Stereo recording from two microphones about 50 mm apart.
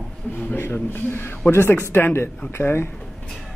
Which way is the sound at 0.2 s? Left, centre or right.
Left.